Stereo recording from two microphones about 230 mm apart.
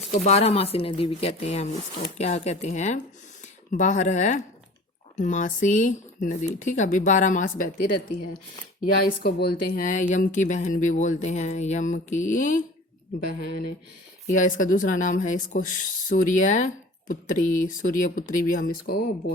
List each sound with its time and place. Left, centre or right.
0.3 s speech: left
14.3 s speech: left